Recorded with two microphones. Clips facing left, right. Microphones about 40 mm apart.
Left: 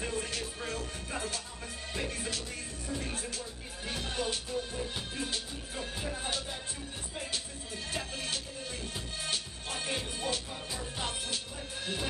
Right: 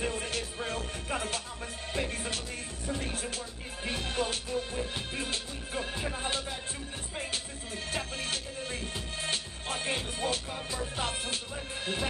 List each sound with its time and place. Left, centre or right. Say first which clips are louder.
0.0 s music: right 2 dB; right
3.8 s music: right 3 dB; right
6.1 s music: right 3 dB; right